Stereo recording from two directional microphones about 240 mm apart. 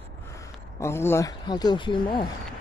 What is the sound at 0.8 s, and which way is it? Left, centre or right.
A man's voice, centre.